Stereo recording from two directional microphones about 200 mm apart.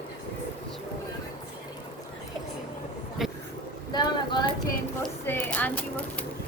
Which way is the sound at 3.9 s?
20° left (ahead or behind).